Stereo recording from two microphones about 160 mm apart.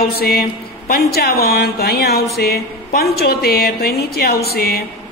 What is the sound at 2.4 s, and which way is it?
A woman's voice, 75° left (ahead or behind).